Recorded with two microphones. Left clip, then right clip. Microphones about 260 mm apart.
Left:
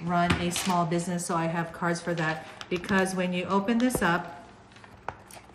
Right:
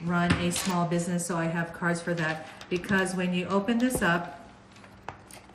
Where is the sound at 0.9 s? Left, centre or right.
Left.